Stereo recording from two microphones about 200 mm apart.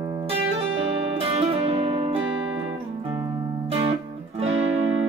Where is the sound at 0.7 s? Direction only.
30° right (ahead or behind).